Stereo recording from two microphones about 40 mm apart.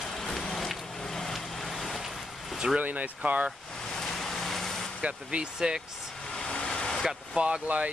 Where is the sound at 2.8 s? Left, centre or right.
Right.